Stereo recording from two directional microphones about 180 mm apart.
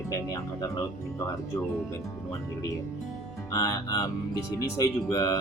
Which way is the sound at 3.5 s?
20° left (ahead or behind).